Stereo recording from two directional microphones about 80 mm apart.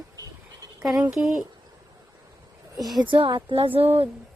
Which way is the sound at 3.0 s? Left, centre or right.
Right.